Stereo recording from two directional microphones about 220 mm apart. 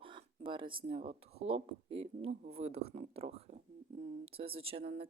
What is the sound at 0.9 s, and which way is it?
Speech, 25° right (ahead or behind).